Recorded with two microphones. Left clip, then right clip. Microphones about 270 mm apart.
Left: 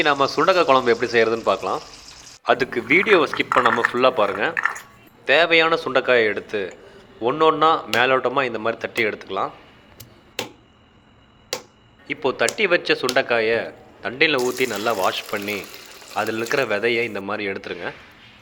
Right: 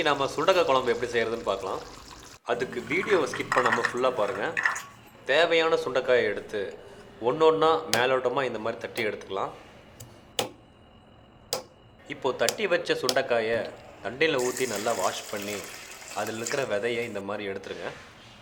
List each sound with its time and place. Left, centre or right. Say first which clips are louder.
0.0 s a man's voice: left 7 dB; centre
12.0 s a man's voice: left 6 dB; centre